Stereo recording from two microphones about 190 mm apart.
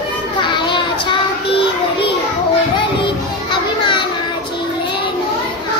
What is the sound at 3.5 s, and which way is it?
Children playing, 25° left (ahead or behind).